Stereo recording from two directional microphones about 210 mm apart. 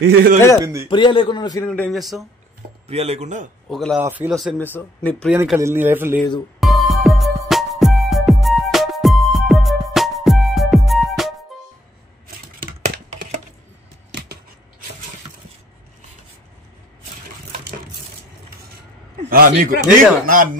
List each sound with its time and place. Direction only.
0.0 s speech: 45° right (ahead or behind)
0.8 s a man's voice: 25° left (ahead or behind)
1.7 s speech: 5° left (ahead or behind)
2.9 s speech: 30° right (ahead or behind)
3.6 s a man's voice: centre (ahead or behind)
4.7 s speech: 5° left (ahead or behind)
5.3 s a man's voice: 10° right (ahead or behind)
6.6 s music: centre (ahead or behind)
12.5 s a sound: 40° right (ahead or behind)
19.2 s speech: 40° right (ahead or behind)